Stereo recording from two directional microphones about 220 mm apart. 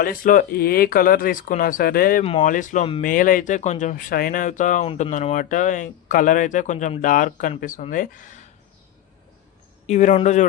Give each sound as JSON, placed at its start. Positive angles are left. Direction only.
{"t": 0.0, "sound": "speech", "side_deg": 40}
{"t": 2.2, "sound": "speech", "side_deg": 30}
{"t": 9.8, "sound": "speech", "side_deg": 30}